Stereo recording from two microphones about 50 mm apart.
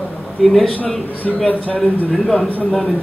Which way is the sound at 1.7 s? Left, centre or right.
Centre.